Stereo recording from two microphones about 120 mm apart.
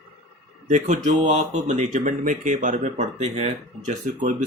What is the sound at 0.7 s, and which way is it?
Speech, 90° right.